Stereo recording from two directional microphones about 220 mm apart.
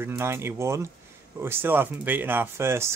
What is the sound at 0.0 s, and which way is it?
Speech, 10° right (ahead or behind).